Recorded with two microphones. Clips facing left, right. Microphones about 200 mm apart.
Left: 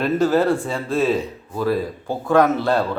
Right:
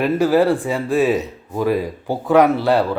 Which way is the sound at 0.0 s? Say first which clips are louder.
Right 2 dB; 15° right (ahead or behind).